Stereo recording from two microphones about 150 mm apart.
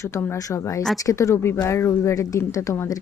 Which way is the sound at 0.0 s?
15° left (ahead or behind).